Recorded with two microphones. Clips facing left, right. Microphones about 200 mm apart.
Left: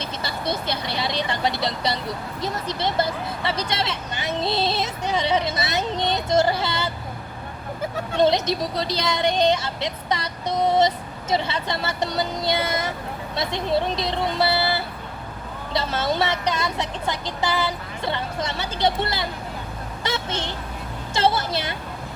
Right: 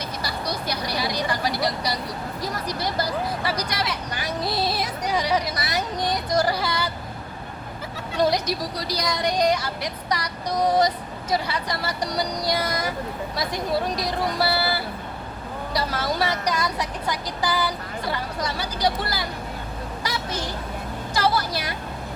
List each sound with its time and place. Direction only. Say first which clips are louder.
0.0 s speech: left 1 dB; 25° left (ahead or behind)
8.1 s speech: left 2 dB; 25° left (ahead or behind)
20.1 s a sound: left 3 dB; 25° left (ahead or behind)
21.1 s speech: left 2 dB; 25° left (ahead or behind)